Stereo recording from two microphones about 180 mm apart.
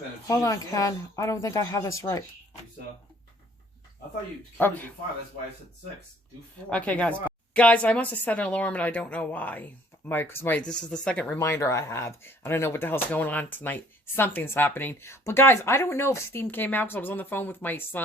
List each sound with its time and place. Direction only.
0.3 s a woman's voice: 20° left (ahead or behind)
4.5 s a woman's voice: 10° left (ahead or behind)
6.7 s a woman's voice: 10° left (ahead or behind)